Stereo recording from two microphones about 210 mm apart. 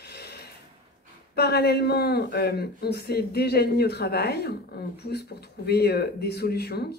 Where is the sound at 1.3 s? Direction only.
50° left (ahead or behind).